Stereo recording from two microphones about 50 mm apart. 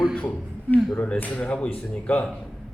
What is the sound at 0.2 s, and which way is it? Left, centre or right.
Speech, left.